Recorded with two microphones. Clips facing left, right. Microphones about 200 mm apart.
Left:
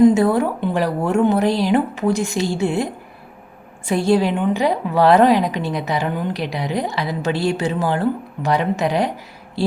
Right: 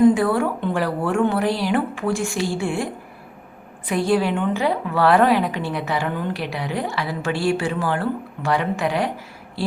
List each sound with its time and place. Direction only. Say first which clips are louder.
0.0 s a woman's voice: left 3 dB; 20° left (ahead or behind)